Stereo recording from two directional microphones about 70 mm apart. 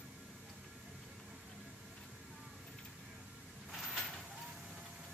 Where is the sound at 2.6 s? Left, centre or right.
Centre.